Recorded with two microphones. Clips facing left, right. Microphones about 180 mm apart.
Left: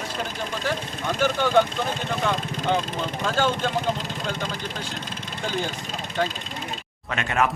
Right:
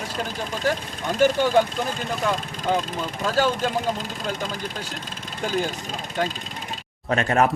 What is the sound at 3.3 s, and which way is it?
Speech, 5° right (ahead or behind).